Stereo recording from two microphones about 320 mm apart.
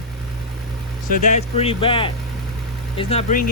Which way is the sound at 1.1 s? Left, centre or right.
Left.